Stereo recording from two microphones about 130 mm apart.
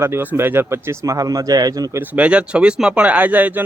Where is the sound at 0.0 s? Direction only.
15° right (ahead or behind).